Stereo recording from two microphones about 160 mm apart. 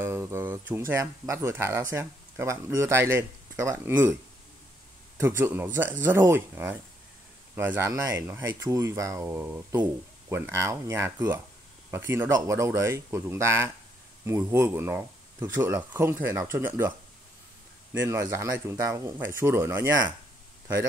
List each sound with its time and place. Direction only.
0.0 s speech: 15° right (ahead or behind)
5.4 s speech: 10° right (ahead or behind)
17.9 s speech: 20° right (ahead or behind)